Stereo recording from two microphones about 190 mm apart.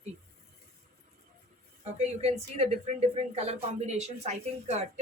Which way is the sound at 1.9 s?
35° right (ahead or behind).